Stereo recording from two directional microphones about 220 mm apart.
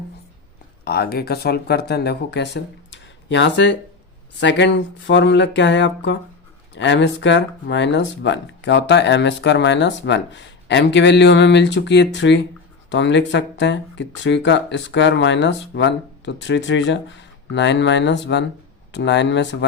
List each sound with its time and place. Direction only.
0.9 s speech: 45° left (ahead or behind)